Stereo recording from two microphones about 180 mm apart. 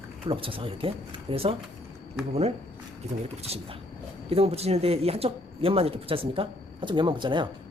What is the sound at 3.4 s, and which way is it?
Speech, 35° right (ahead or behind).